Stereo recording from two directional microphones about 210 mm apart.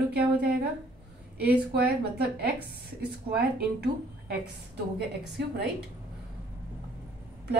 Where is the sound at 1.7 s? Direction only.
45° right (ahead or behind).